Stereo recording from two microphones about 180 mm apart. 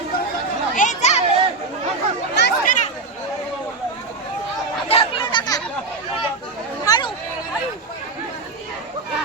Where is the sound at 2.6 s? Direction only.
45° left (ahead or behind).